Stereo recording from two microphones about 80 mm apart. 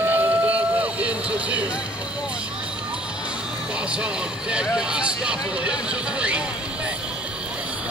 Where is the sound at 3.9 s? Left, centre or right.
Centre.